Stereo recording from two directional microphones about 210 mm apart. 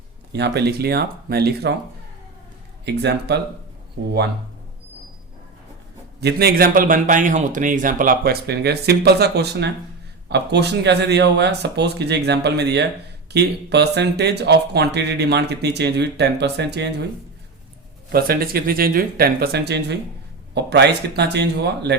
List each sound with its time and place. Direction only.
0.3 s speech: 55° right (ahead or behind)
2.8 s speech: 55° right (ahead or behind)
6.1 s speech: 50° right (ahead or behind)
18.1 s speech: 45° right (ahead or behind)